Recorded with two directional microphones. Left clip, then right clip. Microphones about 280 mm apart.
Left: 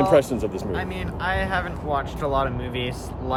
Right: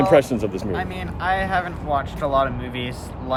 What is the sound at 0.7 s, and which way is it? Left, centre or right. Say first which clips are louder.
Speech: right 2 dB; centre.